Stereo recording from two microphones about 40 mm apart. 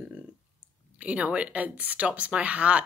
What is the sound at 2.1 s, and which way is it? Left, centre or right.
Speech, right.